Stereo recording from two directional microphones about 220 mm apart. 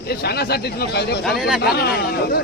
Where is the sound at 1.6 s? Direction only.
45° left (ahead or behind).